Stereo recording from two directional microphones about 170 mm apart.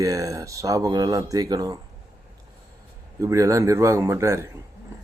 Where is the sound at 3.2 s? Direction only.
20° right (ahead or behind).